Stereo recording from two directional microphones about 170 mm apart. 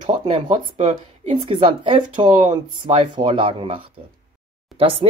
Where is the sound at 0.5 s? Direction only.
40° right (ahead or behind).